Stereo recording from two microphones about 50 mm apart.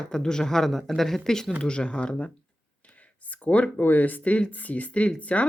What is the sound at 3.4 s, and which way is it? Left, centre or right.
Speech, left.